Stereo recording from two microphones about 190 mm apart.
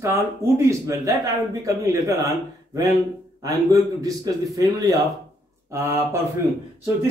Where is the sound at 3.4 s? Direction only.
20° right (ahead or behind).